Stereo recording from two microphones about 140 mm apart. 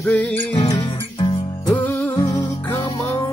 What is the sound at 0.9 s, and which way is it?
Music, 35° left (ahead or behind).